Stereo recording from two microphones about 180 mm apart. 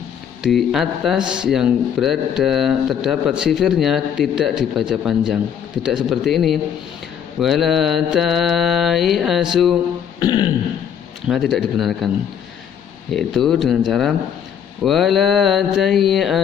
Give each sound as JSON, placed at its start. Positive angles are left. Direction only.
{"t": 0.4, "sound": "speech", "side_deg": 0}
{"t": 10.1, "sound": "burping", "side_deg": 25}
{"t": 11.2, "sound": "speech", "side_deg": 0}
{"t": 13.1, "sound": "speech", "side_deg": 0}